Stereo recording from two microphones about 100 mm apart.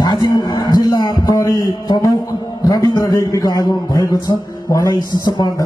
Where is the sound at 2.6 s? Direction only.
40° left (ahead or behind).